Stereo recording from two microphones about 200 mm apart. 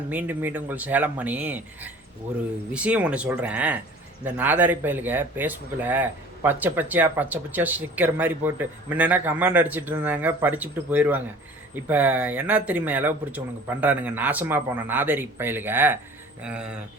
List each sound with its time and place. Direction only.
0.1 s speech: 10° right (ahead or behind)